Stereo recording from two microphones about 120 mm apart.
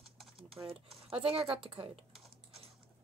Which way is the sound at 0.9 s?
50° right (ahead or behind).